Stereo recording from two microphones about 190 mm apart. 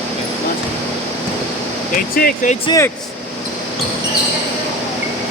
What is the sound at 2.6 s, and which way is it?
Speech, 20° left (ahead or behind).